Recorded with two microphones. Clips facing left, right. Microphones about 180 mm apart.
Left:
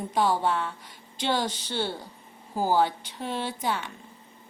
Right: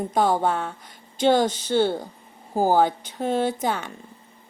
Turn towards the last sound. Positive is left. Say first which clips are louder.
# right 5 dB
turn(degrees=-45)  # may be behind; listen again after turning